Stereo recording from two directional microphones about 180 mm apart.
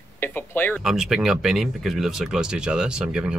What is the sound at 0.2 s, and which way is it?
Speech, 10° left (ahead or behind).